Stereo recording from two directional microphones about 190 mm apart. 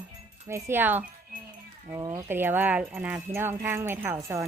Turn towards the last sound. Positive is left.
turn(degrees=-15)  # may be behind; listen again after turning